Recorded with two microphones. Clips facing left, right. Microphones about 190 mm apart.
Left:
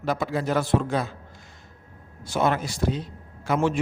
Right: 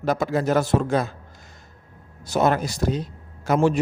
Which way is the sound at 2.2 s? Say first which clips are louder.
Right 3 dB; 40° right (ahead or behind).